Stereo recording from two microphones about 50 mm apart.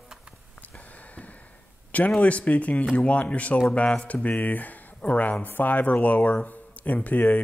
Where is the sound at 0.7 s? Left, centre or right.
Left.